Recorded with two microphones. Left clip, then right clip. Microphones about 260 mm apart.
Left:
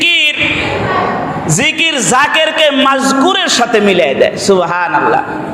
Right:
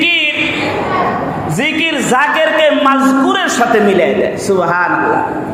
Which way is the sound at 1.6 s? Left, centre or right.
Left.